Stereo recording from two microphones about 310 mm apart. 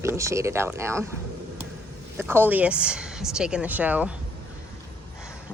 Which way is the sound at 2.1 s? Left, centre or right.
Centre.